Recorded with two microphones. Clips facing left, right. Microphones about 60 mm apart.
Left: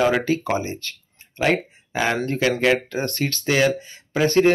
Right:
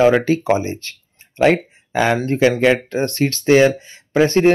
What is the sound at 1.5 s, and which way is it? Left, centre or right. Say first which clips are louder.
Speech: right 4 dB; right.